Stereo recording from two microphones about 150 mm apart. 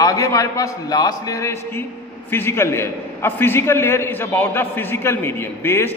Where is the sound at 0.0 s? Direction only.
25° left (ahead or behind).